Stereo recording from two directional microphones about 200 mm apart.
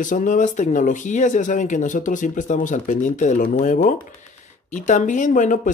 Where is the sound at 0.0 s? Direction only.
40° left (ahead or behind).